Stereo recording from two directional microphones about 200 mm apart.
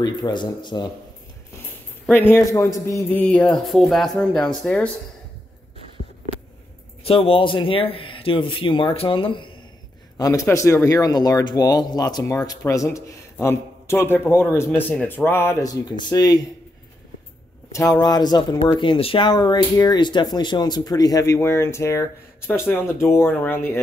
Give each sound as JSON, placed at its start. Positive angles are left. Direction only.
{"t": 0.0, "sound": "speech", "side_deg": 20}
{"t": 2.0, "sound": "a man's voice", "side_deg": 10}
{"t": 7.1, "sound": "a man's voice", "side_deg": 30}
{"t": 18.0, "sound": "a man's voice", "side_deg": 20}